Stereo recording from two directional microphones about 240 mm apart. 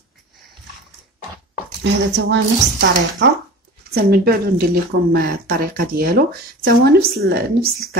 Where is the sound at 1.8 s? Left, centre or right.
Right.